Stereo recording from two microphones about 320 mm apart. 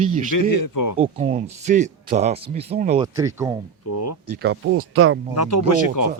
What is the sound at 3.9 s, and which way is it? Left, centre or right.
Speech, left.